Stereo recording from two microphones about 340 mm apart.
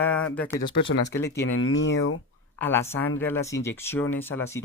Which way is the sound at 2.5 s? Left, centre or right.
Centre.